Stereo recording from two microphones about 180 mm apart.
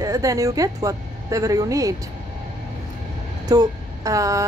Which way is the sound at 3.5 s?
20° right (ahead or behind).